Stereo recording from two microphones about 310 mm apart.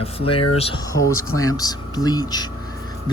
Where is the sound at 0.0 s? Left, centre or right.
Centre.